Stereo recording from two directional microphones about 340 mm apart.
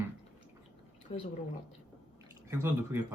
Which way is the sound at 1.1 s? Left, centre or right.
Centre.